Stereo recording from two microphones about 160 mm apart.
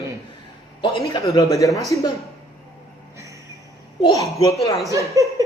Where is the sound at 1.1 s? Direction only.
20° left (ahead or behind).